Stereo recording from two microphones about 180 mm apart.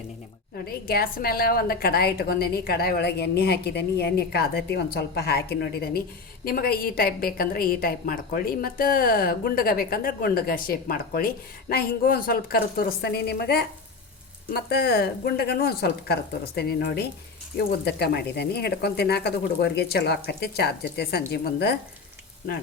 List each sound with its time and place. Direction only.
0.6 s a woman's voice: 55° left (ahead or behind)